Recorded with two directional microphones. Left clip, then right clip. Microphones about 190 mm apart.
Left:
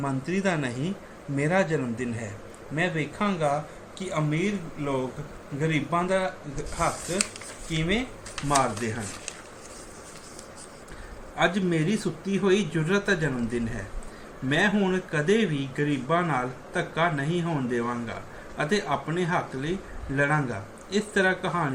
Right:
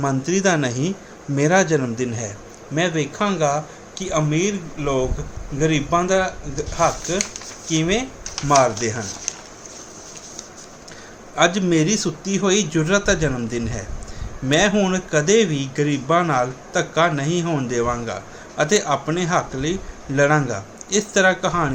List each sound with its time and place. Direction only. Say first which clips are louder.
0.0 s speech: right 8 dB; 60° right (ahead or behind)
11.3 s speech: right 8 dB; 60° right (ahead or behind)